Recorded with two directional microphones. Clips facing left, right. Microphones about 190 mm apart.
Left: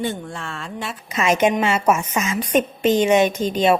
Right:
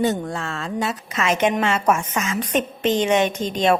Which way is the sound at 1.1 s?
15° left (ahead or behind).